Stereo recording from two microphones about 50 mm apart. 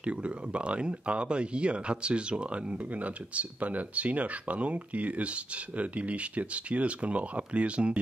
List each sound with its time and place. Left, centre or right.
0.0 s speech: right